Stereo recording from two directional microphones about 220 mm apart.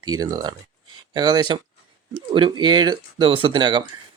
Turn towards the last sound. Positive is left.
turn(degrees=-20)  # may be behind; listen again after turning